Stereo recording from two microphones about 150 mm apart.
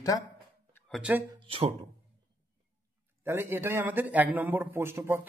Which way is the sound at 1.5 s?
40° right (ahead or behind).